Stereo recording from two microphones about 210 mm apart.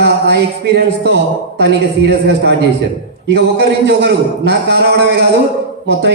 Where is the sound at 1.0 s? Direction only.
55° right (ahead or behind).